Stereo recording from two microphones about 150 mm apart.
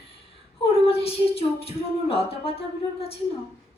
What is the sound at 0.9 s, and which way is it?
Music, 40° left (ahead or behind).